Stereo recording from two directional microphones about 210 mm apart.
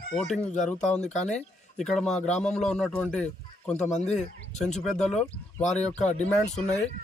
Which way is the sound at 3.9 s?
35° left (ahead or behind).